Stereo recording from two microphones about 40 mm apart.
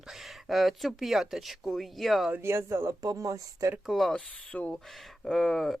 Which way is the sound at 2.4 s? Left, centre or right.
Right.